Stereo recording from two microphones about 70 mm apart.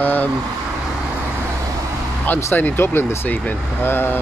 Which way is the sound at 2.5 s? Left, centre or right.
Left.